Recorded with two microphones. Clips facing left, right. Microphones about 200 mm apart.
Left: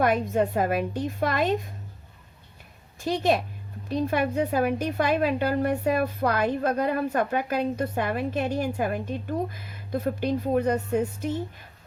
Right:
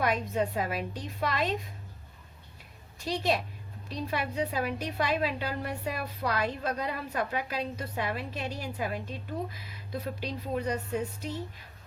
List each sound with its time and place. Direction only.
0.0 s a woman's voice: 50° left (ahead or behind)
3.0 s a woman's voice: 50° left (ahead or behind)